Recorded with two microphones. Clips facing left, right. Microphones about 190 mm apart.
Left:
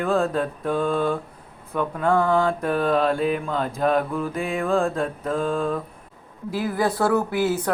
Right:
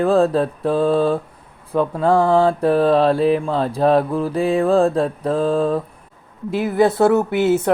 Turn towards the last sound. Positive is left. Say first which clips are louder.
# right 6 dB
turn(degrees=-25)  # may be behind; listen again after turning